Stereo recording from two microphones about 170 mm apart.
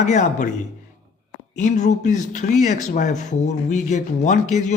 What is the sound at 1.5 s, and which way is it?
Speech, 45° left (ahead or behind).